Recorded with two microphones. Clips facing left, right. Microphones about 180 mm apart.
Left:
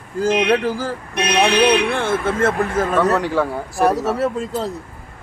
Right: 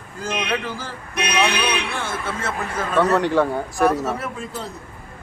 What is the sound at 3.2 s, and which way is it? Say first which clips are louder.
Speech: right 1 dB; 5° left (ahead or behind).